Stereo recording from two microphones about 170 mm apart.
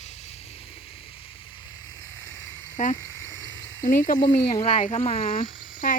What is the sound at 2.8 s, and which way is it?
Speech, 45° left (ahead or behind).